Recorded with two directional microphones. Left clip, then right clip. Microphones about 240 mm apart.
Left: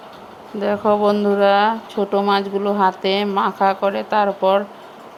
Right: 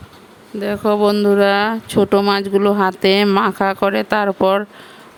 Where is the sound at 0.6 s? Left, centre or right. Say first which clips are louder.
Right 1 dB; right.